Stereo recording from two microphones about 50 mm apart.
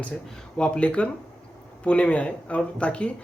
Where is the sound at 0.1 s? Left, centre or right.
Centre.